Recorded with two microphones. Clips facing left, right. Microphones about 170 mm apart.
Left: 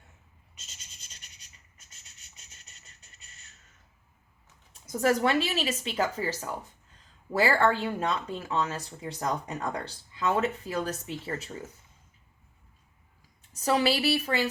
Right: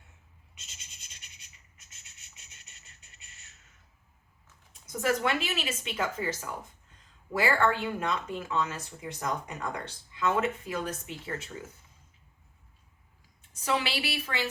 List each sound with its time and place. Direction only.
2.1 s beatboxing: 40° left (ahead or behind)
4.9 s speech: 35° left (ahead or behind)
13.7 s speech: 40° left (ahead or behind)